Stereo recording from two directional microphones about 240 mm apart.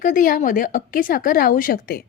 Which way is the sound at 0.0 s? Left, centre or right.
Left.